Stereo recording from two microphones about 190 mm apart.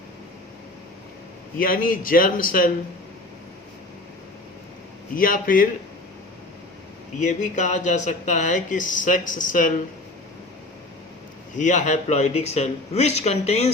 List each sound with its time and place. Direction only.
1.5 s a man's voice: 50° left (ahead or behind)
5.1 s a man's voice: 45° left (ahead or behind)
7.2 s speech: 40° left (ahead or behind)
11.5 s speech: 40° left (ahead or behind)